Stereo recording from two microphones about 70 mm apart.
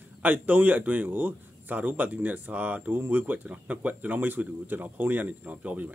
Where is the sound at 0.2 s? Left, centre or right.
Right.